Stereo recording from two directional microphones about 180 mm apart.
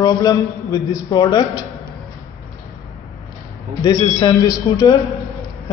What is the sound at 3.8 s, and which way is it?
A man's voice, 20° left (ahead or behind).